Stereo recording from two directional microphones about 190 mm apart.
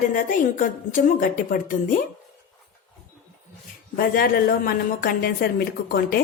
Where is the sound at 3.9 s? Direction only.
50° left (ahead or behind).